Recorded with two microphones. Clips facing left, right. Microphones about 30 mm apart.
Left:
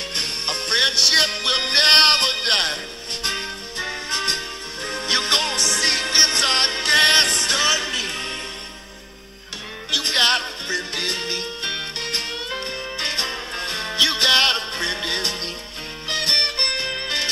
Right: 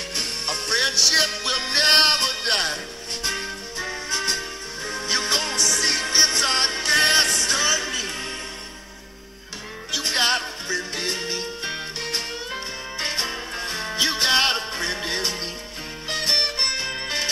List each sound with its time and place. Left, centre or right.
0.1 s music: left
9.8 s music: left